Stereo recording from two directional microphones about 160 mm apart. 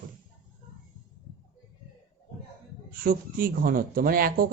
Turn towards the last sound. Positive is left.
turn(degrees=-65)  # may be behind; listen again after turning